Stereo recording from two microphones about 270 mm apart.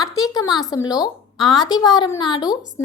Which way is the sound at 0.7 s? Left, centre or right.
Centre.